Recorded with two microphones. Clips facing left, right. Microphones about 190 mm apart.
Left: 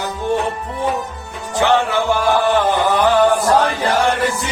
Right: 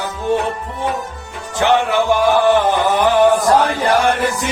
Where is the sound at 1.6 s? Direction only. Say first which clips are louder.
Right 1 dB; 15° right (ahead or behind).